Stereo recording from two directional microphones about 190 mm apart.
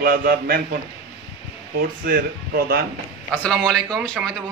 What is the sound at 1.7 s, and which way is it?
A man's voice, 50° right (ahead or behind).